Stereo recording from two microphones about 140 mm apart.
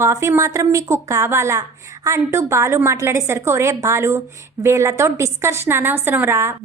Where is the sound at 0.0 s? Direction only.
20° right (ahead or behind).